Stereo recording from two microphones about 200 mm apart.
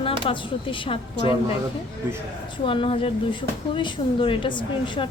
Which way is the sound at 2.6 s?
25° left (ahead or behind).